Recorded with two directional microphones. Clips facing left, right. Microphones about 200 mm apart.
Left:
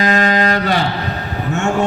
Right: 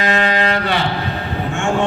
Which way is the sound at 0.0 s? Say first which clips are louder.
Left 2 dB; 40° left (ahead or behind).